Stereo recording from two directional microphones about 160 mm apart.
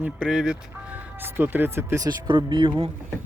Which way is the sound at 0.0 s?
5° right (ahead or behind).